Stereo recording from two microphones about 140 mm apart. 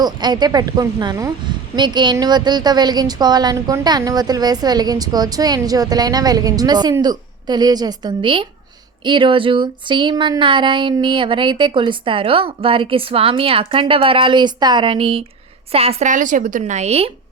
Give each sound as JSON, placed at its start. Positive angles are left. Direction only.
{"t": 0.0, "sound": "a woman's voice", "side_deg": -30}
{"t": 7.0, "sound": "a sound", "side_deg": -30}
{"t": 15.7, "sound": "a woman's voice", "side_deg": -45}
{"t": 16.0, "sound": "speech", "side_deg": -65}